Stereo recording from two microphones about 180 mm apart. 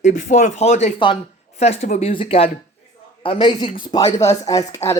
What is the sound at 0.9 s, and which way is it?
A man's voice, 30° left (ahead or behind).